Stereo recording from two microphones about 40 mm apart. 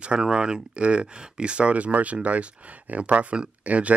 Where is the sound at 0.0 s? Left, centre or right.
Right.